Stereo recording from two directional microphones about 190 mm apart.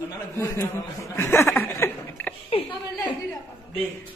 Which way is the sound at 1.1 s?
10° left (ahead or behind).